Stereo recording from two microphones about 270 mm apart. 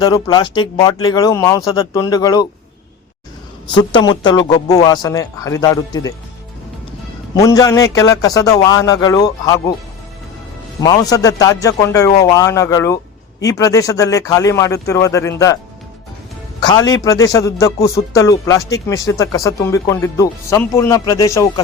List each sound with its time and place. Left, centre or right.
0.0 s a man's voice: centre
3.7 s a man's voice: centre
7.3 s a man's voice: centre
10.8 s a man's voice: centre
16.6 s a man's voice: centre